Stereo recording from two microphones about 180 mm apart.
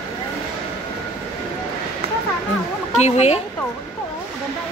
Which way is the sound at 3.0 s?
35° left (ahead or behind).